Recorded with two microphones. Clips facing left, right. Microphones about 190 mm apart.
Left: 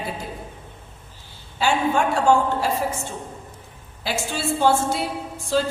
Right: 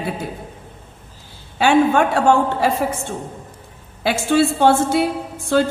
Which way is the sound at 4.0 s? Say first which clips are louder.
Right 11 dB; 60° right (ahead or behind).